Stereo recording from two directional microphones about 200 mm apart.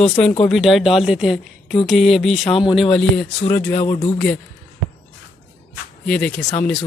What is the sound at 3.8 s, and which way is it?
Speech, 30° left (ahead or behind).